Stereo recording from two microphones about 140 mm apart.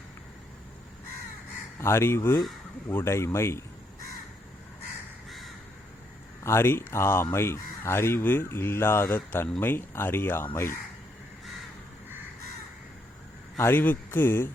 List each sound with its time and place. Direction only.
1.8 s speech: 20° left (ahead or behind)
6.4 s speech: 20° left (ahead or behind)
13.6 s speech: 15° left (ahead or behind)